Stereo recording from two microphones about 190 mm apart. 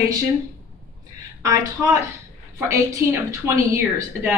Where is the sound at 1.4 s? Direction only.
15° right (ahead or behind).